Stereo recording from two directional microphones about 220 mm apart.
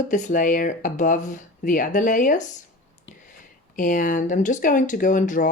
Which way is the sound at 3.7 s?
35° left (ahead or behind).